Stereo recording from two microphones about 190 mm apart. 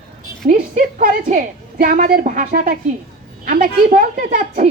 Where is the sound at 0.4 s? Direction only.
45° right (ahead or behind).